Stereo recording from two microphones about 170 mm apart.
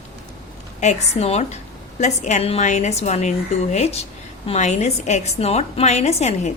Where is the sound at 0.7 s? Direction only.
40° left (ahead or behind).